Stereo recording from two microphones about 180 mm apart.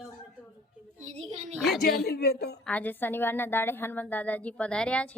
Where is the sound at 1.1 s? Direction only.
40° right (ahead or behind).